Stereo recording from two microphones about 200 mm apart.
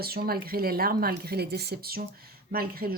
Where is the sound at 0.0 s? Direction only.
50° right (ahead or behind).